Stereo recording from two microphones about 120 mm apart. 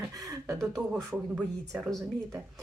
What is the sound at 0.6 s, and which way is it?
Speech, 5° left (ahead or behind).